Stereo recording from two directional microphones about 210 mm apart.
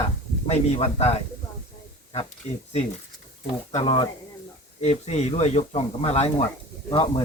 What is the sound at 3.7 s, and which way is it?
Speech, 25° left (ahead or behind).